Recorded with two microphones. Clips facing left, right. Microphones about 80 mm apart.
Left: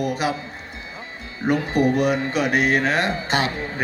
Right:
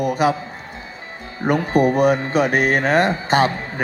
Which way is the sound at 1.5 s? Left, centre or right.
Right.